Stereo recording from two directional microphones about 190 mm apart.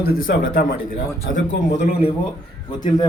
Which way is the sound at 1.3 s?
70° left (ahead or behind).